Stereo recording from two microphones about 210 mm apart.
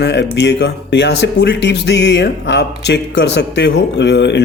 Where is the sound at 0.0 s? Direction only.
55° left (ahead or behind).